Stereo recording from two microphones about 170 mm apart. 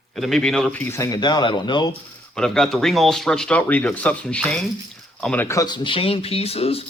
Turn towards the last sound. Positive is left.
turn(degrees=35)  # may be behind; listen again after turning